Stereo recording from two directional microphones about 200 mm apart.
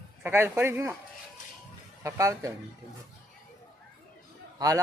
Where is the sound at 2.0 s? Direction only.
15° right (ahead or behind).